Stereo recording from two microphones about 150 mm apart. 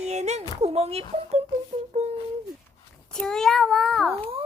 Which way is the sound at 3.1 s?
5° left (ahead or behind).